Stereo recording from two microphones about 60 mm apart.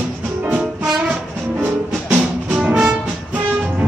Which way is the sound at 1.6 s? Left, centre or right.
Right.